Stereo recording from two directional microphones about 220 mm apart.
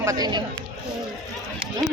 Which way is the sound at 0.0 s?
15° right (ahead or behind).